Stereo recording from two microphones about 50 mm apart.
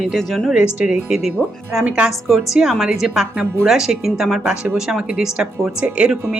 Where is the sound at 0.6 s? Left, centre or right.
Centre.